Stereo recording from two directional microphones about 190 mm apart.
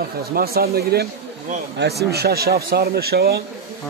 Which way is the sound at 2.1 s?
55° right (ahead or behind).